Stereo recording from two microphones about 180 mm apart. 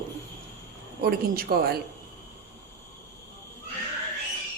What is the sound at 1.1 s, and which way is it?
Speech, 60° right (ahead or behind).